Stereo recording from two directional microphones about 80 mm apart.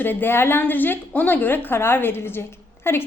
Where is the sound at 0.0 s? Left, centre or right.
Left.